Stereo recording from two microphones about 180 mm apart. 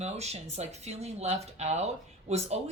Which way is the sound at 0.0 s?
35° right (ahead or behind).